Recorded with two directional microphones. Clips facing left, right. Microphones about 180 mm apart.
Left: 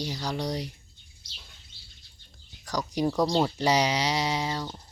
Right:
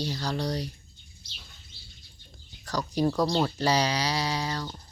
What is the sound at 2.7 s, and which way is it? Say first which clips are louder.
Speech: right 1 dB; 15° left (ahead or behind).